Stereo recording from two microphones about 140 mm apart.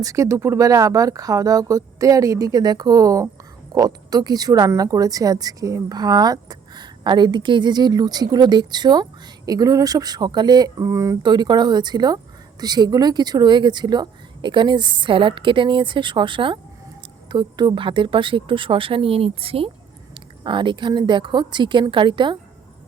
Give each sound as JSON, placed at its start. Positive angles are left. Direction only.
{"t": 0.0, "sound": "speech", "side_deg": -25}